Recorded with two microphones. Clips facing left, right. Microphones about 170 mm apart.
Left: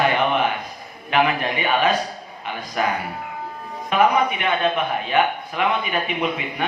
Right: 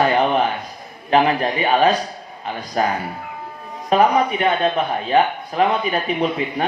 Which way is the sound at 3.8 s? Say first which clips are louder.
Right 2 dB; 35° right (ahead or behind).